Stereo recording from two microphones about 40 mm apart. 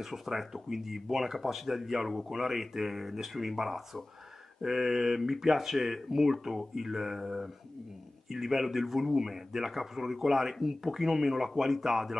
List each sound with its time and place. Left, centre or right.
0.0 s speech: centre